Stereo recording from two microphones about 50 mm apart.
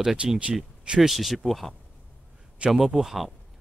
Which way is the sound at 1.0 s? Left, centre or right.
Centre.